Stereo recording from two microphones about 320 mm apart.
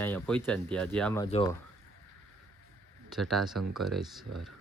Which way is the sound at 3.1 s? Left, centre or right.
Centre.